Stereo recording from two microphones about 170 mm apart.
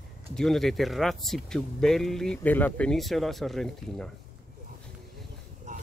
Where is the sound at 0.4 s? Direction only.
Centre (ahead or behind).